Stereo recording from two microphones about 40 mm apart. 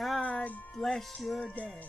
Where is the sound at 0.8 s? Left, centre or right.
Centre.